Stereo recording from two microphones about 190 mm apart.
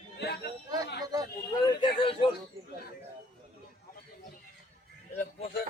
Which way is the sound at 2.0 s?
30° left (ahead or behind).